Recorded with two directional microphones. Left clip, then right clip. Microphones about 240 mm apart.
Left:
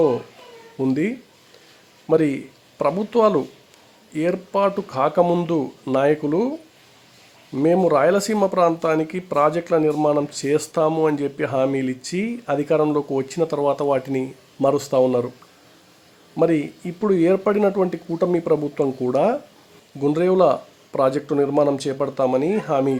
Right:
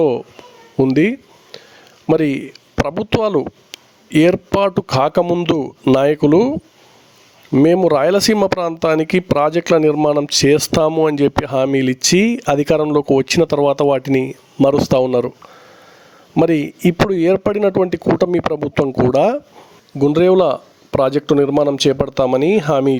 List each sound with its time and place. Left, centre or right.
0.8 s speech: right
7.5 s speech: right
16.3 s speech: right